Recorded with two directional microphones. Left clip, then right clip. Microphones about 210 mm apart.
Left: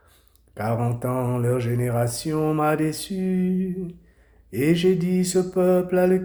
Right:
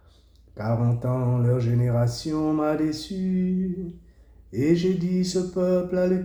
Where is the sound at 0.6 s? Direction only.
40° left (ahead or behind).